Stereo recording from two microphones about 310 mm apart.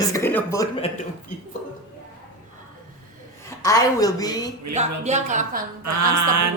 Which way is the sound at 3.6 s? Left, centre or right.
Centre.